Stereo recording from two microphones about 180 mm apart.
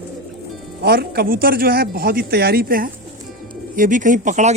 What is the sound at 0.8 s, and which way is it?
Speech, 60° right (ahead or behind).